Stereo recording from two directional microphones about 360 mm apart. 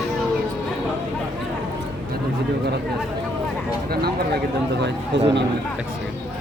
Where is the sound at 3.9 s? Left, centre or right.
Right.